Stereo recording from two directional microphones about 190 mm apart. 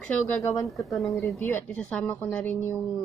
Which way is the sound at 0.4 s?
15° left (ahead or behind).